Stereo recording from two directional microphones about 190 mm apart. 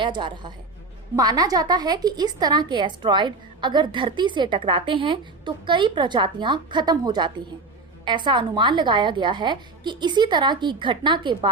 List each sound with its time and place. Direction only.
0.0 s a woman's voice: 25° right (ahead or behind)